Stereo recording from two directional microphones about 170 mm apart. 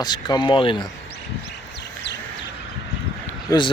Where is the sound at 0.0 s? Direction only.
25° left (ahead or behind).